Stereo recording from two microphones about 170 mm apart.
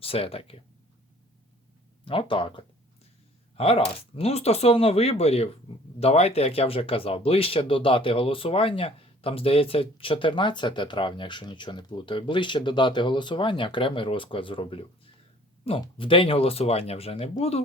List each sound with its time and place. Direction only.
0.0 s speech: 35° left (ahead or behind)
2.0 s speech: 30° left (ahead or behind)